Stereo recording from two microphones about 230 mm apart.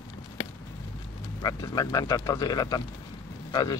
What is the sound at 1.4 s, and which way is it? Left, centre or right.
Speech, centre.